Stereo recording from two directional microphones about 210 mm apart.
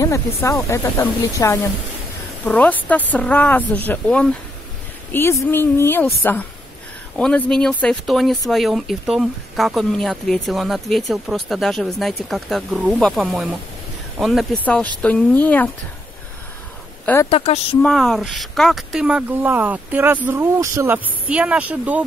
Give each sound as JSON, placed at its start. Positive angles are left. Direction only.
{"t": 0.0, "sound": "speech", "side_deg": 15}
{"t": 17.0, "sound": "speech", "side_deg": 10}
{"t": 17.3, "sound": "speech", "side_deg": 30}
{"t": 17.8, "sound": "speech", "side_deg": 0}